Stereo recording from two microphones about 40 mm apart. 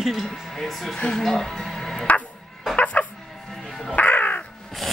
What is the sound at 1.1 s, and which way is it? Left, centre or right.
Speech, centre.